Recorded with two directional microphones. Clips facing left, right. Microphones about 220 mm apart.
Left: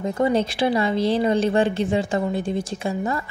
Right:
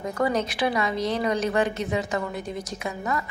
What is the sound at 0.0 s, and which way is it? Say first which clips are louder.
Speech: left 4 dB; 25° left (ahead or behind).